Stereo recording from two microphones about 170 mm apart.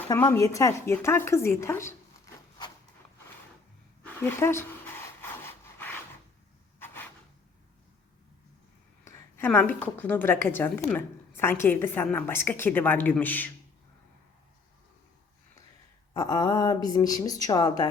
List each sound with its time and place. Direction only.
0.2 s a woman's voice: 15° left (ahead or behind)
4.0 s rub: 15° left (ahead or behind)
6.7 s a sound: 10° left (ahead or behind)
9.0 s a woman's voice: 15° left (ahead or behind)
16.1 s speech: 20° left (ahead or behind)